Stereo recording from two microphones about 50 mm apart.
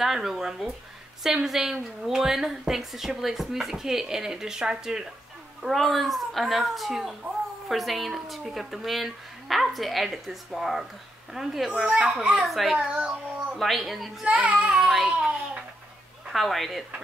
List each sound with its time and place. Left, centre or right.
0.0 s a woman's voice: centre
5.6 s speech: centre
12.2 s a woman's voice: centre
12.4 s speech: centre
12.7 s a child's voice: right
13.6 s speech: centre
14.3 s child singing: right
14.8 s a sound: centre
16.3 s a woman's voice: centre